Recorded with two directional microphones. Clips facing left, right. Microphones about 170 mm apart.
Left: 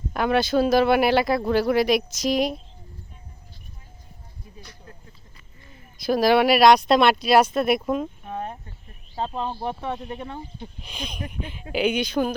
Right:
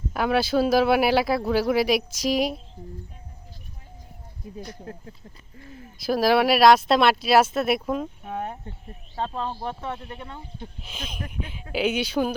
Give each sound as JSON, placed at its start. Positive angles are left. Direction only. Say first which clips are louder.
{"t": 0.1, "sound": "speech", "louder": "left 1 dB", "side_deg": -5}
{"t": 4.6, "sound": "speech", "louder": "right 11 dB", "side_deg": -50}
{"t": 6.0, "sound": "speech", "louder": "left 2 dB", "side_deg": -5}
{"t": 8.2, "sound": "a sound", "louder": "even", "side_deg": -10}
{"t": 9.1, "sound": "speech", "louder": "left 1 dB", "side_deg": 10}
{"t": 10.8, "sound": "speech", "louder": "left 3 dB", "side_deg": -5}